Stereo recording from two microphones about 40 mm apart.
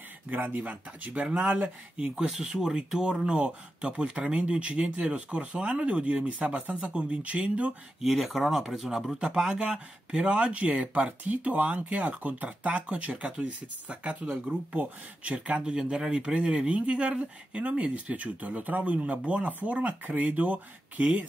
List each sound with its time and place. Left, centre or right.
0.3 s speech: right
1.1 s speech: right
8.0 s speech: centre; by 15.3 s right
15.3 s speech: right
15.7 s speech: centre; by 18.9 s right
19.0 s speech: right
19.4 s speech: right